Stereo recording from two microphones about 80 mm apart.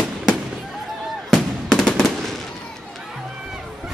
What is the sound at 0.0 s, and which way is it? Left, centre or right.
Fireworks, centre.